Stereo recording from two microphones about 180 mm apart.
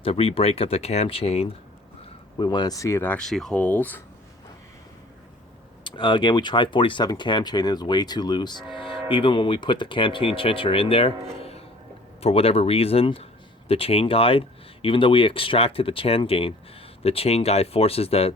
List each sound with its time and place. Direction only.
0.0 s speech: 35° left (ahead or behind)
2.4 s speech: 25° left (ahead or behind)
5.8 s speech: 25° left (ahead or behind)